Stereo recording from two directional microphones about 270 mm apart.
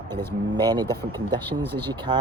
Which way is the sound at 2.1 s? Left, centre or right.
Centre.